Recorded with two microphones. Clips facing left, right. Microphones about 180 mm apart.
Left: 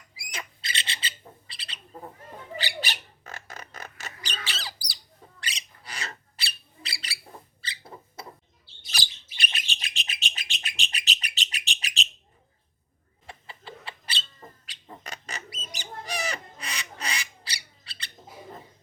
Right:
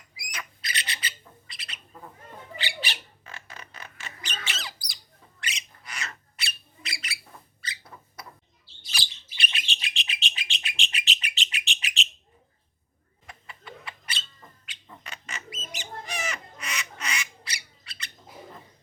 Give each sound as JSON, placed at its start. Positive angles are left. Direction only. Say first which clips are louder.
{"t": 0.2, "sound": "bird", "louder": "left 1 dB", "side_deg": 25}
{"t": 8.9, "sound": "bird", "louder": "left 1 dB", "side_deg": 40}
{"t": 13.2, "sound": "bird", "louder": "left 1 dB", "side_deg": 30}
{"t": 15.7, "sound": "squawk", "louder": "left 2 dB", "side_deg": 35}